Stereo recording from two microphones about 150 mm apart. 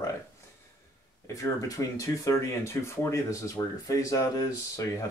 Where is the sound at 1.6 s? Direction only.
20° left (ahead or behind).